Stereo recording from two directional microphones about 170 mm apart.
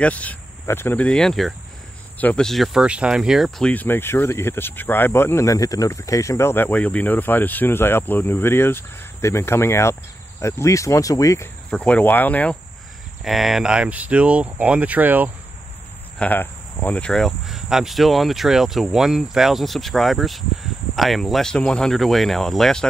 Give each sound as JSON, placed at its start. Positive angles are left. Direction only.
{"t": 0.0, "sound": "speech", "side_deg": 10}
{"t": 11.7, "sound": "speech", "side_deg": 5}
{"t": 13.2, "sound": "speech", "side_deg": 0}
{"t": 16.2, "sound": "cricket", "side_deg": 10}